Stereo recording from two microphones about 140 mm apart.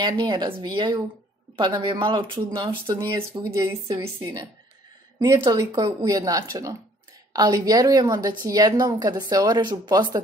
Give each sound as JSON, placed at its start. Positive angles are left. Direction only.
{"t": 0.0, "sound": "a woman's voice", "side_deg": -35}